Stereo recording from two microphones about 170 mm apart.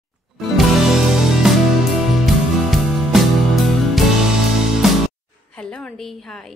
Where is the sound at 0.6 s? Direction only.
Centre (ahead or behind).